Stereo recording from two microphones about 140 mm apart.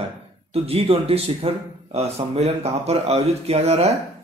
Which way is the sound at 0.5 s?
45° right (ahead or behind).